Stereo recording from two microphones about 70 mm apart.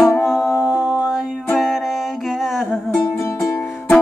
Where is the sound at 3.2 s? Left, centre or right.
Left.